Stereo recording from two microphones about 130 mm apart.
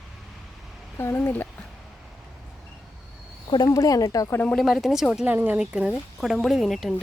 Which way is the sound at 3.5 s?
30° left (ahead or behind).